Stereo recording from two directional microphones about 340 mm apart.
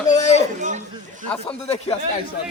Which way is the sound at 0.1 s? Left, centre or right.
Centre.